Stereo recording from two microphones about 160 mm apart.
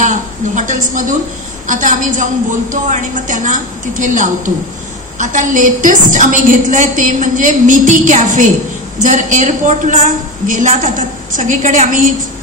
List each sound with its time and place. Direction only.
0.0 s a woman's voice: 50° right (ahead or behind)